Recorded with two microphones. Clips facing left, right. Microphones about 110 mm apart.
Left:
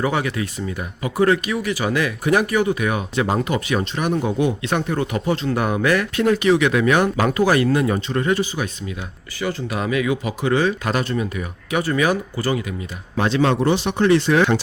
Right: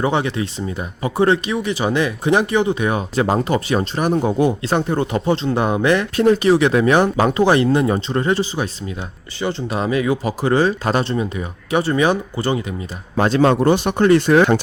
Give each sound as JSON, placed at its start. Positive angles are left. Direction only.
{"t": 0.0, "sound": "speech", "side_deg": -25}
{"t": 13.1, "sound": "speech", "side_deg": -45}